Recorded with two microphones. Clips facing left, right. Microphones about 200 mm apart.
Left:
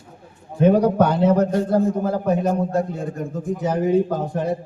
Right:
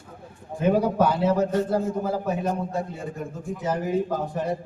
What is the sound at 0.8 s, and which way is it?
Speech, 5° right (ahead or behind).